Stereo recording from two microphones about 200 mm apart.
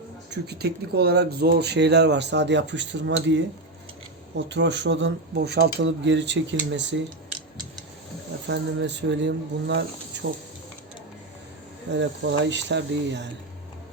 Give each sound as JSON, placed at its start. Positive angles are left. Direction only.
{"t": 0.3, "sound": "speech", "side_deg": -55}
{"t": 4.4, "sound": "speech", "side_deg": -60}
{"t": 8.4, "sound": "speech", "side_deg": -60}
{"t": 11.9, "sound": "speech", "side_deg": -60}